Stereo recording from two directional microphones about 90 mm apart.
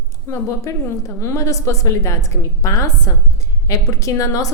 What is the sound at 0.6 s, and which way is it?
A woman's voice, 35° left (ahead or behind).